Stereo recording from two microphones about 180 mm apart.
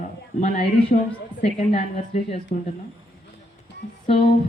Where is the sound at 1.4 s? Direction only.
40° left (ahead or behind).